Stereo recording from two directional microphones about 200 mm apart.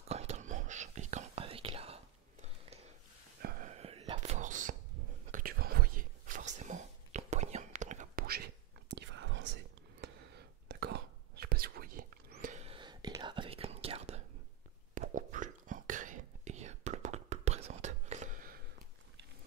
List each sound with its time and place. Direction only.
0.1 s whispering: 35° right (ahead or behind)
3.4 s whispering: 40° right (ahead or behind)